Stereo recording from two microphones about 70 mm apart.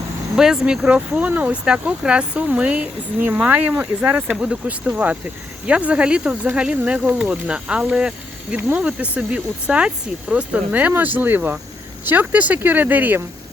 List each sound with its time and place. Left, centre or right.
0.3 s speech: centre
1.2 s speech: right